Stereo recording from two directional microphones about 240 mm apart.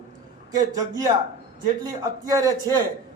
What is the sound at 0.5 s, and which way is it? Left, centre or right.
A man's voice, centre.